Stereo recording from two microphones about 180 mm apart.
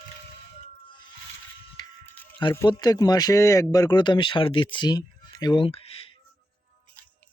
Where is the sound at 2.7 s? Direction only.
20° left (ahead or behind).